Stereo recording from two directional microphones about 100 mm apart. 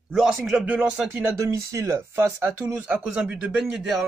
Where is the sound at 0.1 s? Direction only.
5° right (ahead or behind).